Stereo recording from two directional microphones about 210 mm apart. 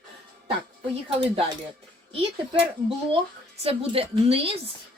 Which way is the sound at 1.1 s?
25° right (ahead or behind).